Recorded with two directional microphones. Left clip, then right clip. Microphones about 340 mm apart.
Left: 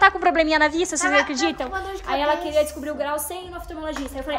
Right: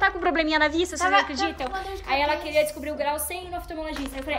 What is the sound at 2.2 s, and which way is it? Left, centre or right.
Speech, left.